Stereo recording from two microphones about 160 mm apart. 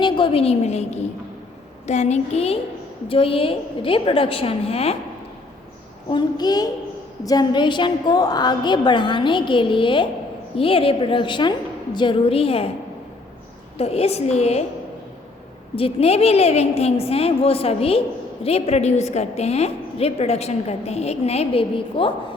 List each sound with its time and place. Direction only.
0.0 s a woman's voice: 35° left (ahead or behind)
6.1 s a woman's voice: 25° left (ahead or behind)
13.7 s a woman's voice: 40° left (ahead or behind)
15.7 s a woman's voice: 35° left (ahead or behind)